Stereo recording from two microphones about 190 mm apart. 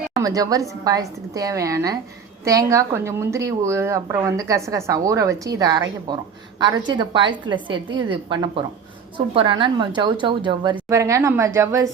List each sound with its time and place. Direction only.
0.2 s a woman's voice: 20° right (ahead or behind)